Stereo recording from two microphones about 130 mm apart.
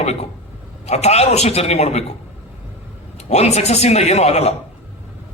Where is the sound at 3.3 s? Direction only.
60° left (ahead or behind).